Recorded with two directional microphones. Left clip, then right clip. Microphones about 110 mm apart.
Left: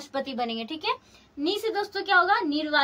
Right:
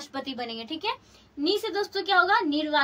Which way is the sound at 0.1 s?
30° left (ahead or behind).